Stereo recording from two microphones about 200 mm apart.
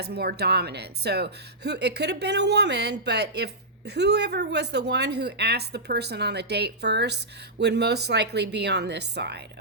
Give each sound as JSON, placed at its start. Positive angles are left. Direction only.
{"t": 0.0, "sound": "a woman's voice", "side_deg": -55}